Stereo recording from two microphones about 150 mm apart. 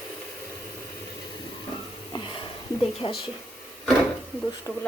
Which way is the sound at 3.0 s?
35° left (ahead or behind).